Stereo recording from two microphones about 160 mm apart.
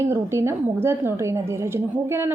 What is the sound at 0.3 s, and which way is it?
A woman's voice, 15° right (ahead or behind).